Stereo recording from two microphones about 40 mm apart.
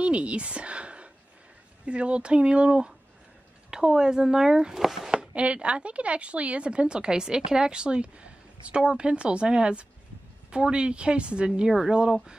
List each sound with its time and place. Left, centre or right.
0.0 s a sound: right
1.9 s speech: right; by 5.1 s centre
5.3 s speech: right